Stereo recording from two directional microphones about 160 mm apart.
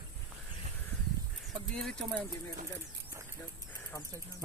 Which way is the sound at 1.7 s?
5° left (ahead or behind).